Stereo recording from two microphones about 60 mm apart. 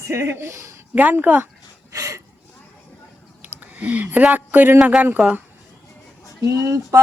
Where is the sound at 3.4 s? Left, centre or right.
Right.